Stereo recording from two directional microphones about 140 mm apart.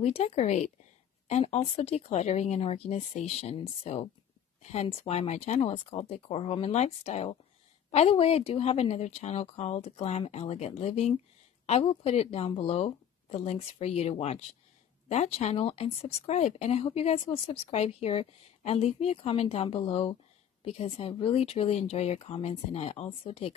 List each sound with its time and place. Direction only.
0.0 s speech: 50° left (ahead or behind)